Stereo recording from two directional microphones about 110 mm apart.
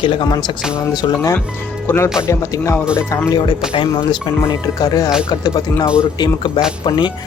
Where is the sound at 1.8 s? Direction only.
25° left (ahead or behind).